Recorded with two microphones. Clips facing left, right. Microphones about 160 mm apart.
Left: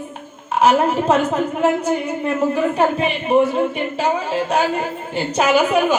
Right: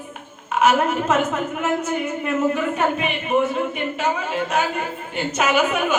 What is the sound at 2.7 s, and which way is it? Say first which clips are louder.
A woman's voice: left 4 dB; 35° left (ahead or behind).